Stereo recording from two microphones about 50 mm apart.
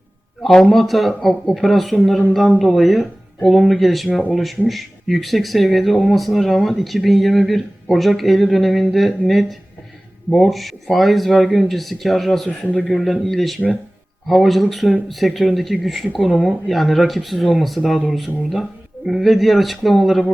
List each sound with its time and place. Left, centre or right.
0.4 s speech: centre
12.5 s speech: left
12.9 s speech: centre